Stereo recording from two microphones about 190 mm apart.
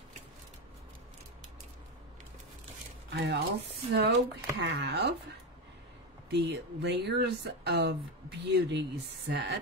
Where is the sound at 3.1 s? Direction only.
65° right (ahead or behind).